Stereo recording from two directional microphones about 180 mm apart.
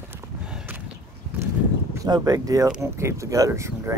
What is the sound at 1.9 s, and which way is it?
Speech, 20° right (ahead or behind).